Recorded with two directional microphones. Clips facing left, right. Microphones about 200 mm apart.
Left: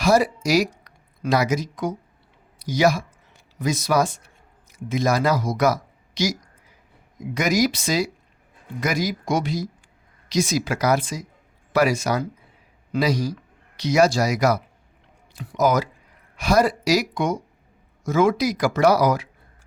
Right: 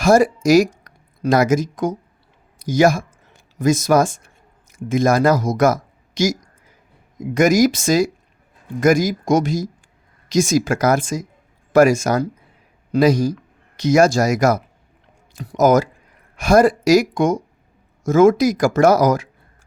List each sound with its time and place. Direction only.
0.0 s speech: 50° right (ahead or behind)